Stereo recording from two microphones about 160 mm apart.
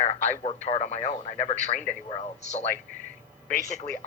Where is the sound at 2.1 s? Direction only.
40° left (ahead or behind).